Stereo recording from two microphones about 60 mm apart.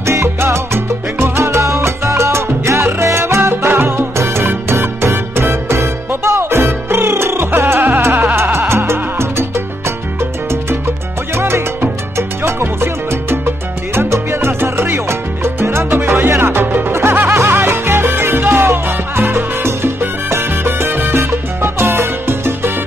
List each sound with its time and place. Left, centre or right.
0.0 s salsa music: right
11.3 s music: right
13.9 s salsa music: right